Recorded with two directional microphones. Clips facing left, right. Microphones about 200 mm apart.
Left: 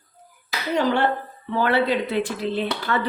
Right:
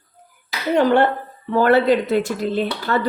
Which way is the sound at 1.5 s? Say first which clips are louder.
Right 6 dB; 45° right (ahead or behind).